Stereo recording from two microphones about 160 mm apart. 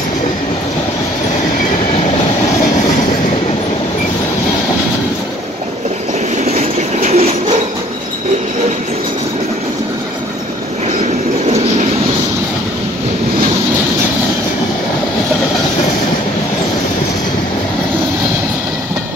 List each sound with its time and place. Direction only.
6.3 s train: 45° right (ahead or behind)